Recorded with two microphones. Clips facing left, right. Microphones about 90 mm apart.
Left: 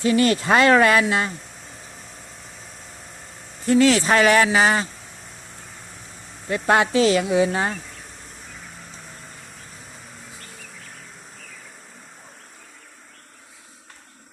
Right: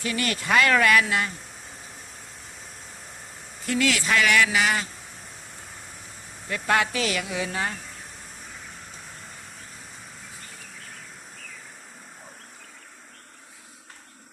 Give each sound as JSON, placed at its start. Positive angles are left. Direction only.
{"t": 0.0, "sound": "speech", "side_deg": 30}
{"t": 3.7, "sound": "speech", "side_deg": 30}
{"t": 6.5, "sound": "speech", "side_deg": 25}